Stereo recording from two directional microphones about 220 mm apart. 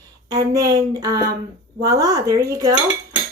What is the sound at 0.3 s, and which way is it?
Speech, 15° right (ahead or behind).